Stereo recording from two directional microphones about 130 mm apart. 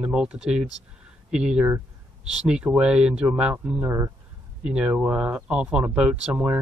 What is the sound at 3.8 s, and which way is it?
Speech, 20° right (ahead or behind).